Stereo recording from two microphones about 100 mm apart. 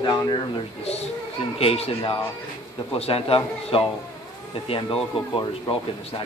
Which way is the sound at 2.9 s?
75° left (ahead or behind).